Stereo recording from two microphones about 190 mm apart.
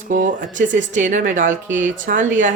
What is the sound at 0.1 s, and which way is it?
Speech, 45° right (ahead or behind).